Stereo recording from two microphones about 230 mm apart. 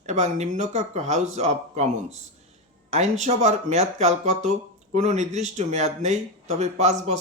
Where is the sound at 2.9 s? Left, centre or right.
Right.